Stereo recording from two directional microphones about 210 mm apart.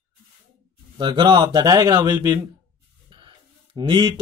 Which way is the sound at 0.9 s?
20° right (ahead or behind).